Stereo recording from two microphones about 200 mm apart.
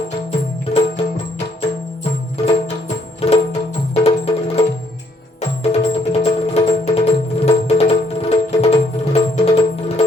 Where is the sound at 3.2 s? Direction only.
30° left (ahead or behind).